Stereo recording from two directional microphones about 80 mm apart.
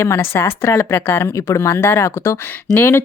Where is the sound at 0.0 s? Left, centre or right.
Left.